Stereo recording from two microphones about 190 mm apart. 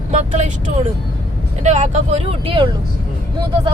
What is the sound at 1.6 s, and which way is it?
Speech, 35° right (ahead or behind).